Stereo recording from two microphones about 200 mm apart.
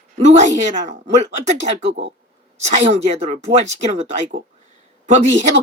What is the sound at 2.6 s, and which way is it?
Speech, 35° right (ahead or behind).